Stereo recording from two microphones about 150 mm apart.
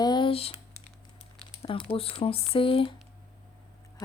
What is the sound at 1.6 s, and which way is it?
Speech, 35° left (ahead or behind).